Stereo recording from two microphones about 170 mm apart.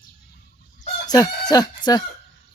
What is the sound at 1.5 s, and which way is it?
Speech, 25° left (ahead or behind).